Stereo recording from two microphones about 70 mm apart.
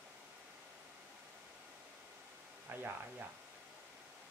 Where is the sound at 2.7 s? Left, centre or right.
Right.